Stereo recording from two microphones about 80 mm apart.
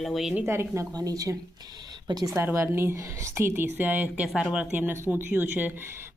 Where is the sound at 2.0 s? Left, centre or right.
Right.